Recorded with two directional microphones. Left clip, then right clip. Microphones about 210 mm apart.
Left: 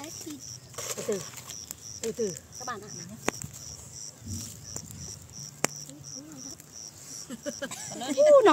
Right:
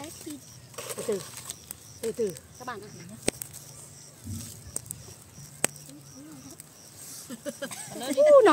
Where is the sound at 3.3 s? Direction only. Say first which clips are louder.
Even; 5° right (ahead or behind).